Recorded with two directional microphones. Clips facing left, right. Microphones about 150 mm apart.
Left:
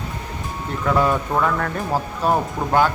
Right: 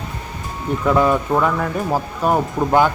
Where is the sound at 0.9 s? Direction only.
5° right (ahead or behind).